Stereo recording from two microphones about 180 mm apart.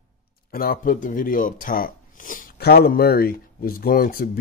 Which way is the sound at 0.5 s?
55° left (ahead or behind).